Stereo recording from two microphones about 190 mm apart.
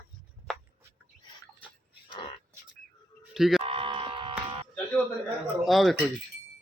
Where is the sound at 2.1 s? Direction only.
25° left (ahead or behind).